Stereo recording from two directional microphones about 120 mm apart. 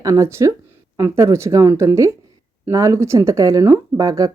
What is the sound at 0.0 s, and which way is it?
Speech, 25° right (ahead or behind).